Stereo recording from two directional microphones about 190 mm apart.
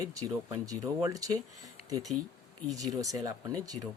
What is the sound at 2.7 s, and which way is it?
Speech, 20° right (ahead or behind).